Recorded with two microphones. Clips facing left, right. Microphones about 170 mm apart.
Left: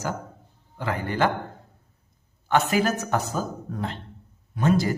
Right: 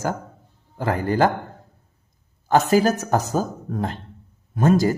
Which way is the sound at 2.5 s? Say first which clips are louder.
Right 5 dB; 40° right (ahead or behind).